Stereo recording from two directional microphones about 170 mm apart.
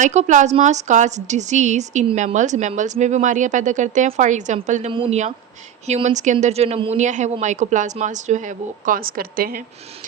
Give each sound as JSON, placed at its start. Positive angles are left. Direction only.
{"t": 0.0, "sound": "a woman's voice", "side_deg": -45}